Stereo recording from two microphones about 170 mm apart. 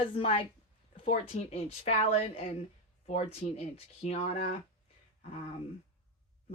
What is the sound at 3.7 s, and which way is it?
Speech, 35° left (ahead or behind).